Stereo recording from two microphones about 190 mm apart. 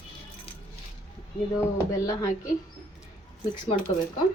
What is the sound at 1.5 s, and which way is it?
Speech, 15° left (ahead or behind).